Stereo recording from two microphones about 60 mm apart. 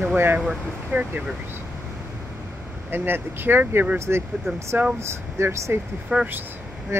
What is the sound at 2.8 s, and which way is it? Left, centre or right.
Speech, right.